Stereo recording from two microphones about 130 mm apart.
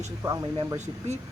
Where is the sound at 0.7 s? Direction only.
60° right (ahead or behind).